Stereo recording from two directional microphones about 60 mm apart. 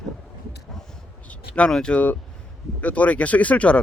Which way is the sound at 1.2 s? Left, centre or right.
Left.